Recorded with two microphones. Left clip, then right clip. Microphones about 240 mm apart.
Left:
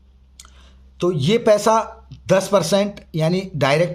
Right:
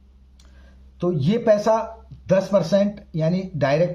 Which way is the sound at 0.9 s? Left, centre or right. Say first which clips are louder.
Left 5 dB; left.